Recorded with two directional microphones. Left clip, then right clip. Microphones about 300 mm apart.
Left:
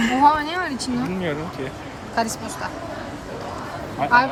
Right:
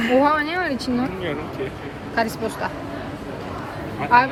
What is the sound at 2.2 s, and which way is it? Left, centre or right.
Speech, centre.